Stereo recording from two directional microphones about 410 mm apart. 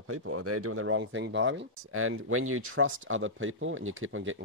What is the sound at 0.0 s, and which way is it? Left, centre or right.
Speech, right.